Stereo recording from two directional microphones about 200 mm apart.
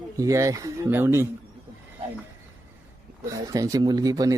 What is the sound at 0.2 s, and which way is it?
Speech, 15° right (ahead or behind).